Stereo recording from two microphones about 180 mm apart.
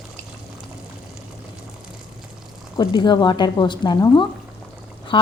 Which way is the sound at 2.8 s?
25° left (ahead or behind).